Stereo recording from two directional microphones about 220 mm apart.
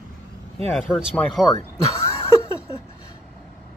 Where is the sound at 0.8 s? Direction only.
Centre (ahead or behind).